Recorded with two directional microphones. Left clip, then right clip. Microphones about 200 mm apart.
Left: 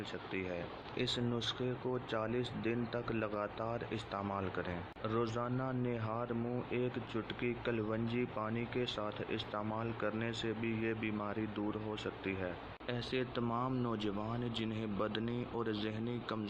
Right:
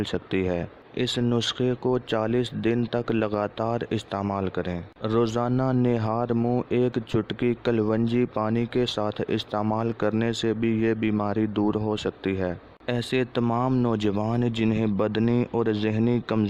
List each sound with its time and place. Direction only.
0.0 s speech: 60° right (ahead or behind)